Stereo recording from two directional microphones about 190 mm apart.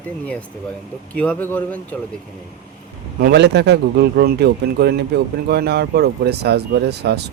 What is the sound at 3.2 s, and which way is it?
Speech, 60° right (ahead or behind).